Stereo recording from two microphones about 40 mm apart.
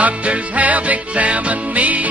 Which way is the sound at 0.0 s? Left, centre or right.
Right.